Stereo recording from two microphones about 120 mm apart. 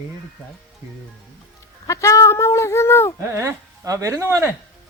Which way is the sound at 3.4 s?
25° right (ahead or behind).